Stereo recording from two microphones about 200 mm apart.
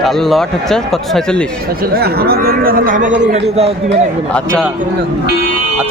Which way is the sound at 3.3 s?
30° right (ahead or behind).